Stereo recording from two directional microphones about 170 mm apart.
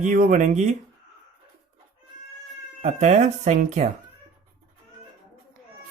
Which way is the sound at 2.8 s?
40° right (ahead or behind).